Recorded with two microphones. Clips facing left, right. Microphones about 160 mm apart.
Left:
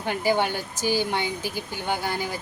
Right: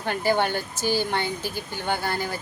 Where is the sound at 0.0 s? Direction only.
10° left (ahead or behind).